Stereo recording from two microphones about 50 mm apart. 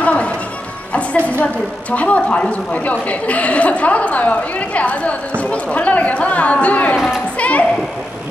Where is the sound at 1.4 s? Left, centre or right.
Left.